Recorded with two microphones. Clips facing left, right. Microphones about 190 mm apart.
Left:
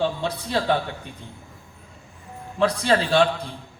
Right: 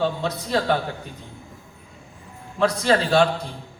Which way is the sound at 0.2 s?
30° left (ahead or behind).